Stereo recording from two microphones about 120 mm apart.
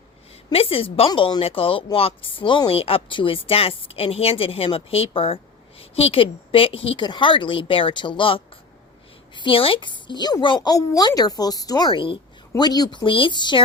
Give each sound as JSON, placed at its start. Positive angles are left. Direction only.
{"t": 0.5, "sound": "speech", "side_deg": 50}
{"t": 7.0, "sound": "a woman's voice", "side_deg": 40}
{"t": 11.9, "sound": "a woman's voice", "side_deg": 45}